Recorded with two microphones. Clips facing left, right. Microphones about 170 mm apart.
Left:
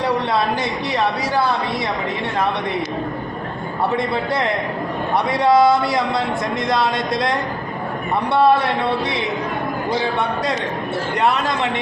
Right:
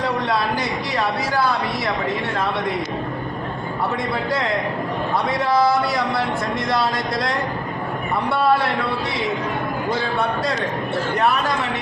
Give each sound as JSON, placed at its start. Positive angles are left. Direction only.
{"t": 5.1, "sound": "a man's voice", "side_deg": 25}
{"t": 8.3, "sound": "a man's voice", "side_deg": 25}